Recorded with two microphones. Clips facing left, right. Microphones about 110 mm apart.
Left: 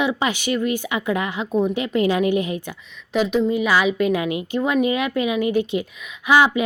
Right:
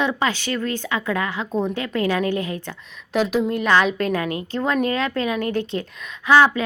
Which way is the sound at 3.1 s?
Centre (ahead or behind).